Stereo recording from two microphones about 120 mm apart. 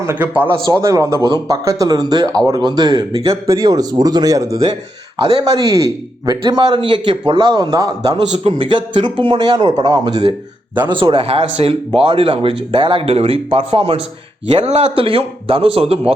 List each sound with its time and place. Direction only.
0.0 s a man's voice: 15° right (ahead or behind); by 8.2 s 30° right (ahead or behind)
8.4 s speech: 45° right (ahead or behind)
14.5 s speech: 65° right (ahead or behind)
15.0 s speech: 50° right (ahead or behind)